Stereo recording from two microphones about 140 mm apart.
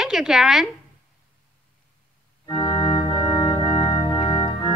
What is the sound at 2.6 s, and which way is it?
Organ, 30° left (ahead or behind).